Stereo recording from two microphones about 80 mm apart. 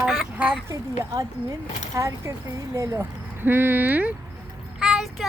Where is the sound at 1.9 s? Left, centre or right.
Right.